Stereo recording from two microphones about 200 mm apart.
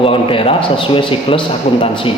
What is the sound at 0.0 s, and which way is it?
A man's voice, 25° left (ahead or behind).